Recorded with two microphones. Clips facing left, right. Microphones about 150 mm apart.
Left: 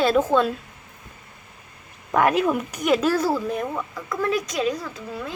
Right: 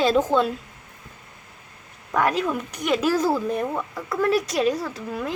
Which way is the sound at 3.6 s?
30° right (ahead or behind).